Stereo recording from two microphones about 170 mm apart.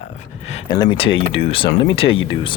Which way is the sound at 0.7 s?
25° left (ahead or behind).